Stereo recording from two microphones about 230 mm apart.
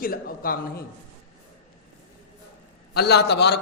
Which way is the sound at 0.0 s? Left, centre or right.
Left.